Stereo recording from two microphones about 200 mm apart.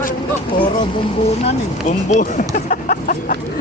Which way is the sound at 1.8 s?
40° left (ahead or behind).